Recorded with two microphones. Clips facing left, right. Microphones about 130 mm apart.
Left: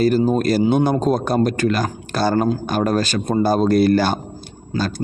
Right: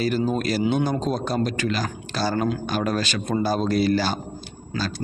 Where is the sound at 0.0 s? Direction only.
45° left (ahead or behind).